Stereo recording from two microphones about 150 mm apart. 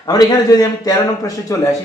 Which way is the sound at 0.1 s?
25° left (ahead or behind).